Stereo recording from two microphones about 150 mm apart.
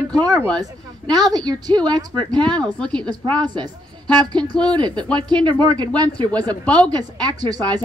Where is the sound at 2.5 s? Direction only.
5° left (ahead or behind).